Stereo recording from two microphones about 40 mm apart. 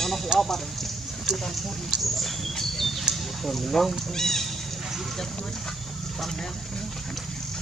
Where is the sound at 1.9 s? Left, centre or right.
Centre.